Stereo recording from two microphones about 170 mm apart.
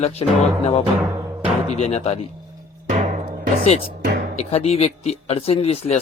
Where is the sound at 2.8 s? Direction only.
35° right (ahead or behind).